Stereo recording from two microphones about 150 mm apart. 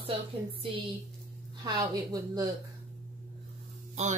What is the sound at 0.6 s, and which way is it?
Speech, 35° right (ahead or behind).